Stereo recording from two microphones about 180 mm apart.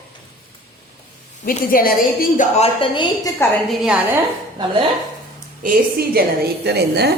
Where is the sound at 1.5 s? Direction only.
55° left (ahead or behind).